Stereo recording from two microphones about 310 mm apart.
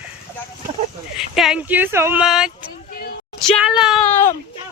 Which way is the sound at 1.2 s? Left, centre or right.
Centre.